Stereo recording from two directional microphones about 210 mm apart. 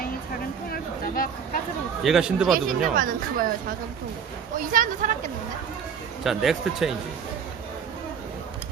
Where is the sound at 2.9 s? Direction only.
40° right (ahead or behind).